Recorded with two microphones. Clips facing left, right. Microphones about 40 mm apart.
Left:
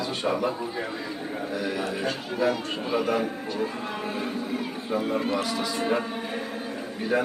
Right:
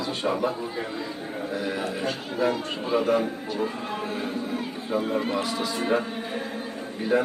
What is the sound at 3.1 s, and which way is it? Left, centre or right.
A man's voice, centre.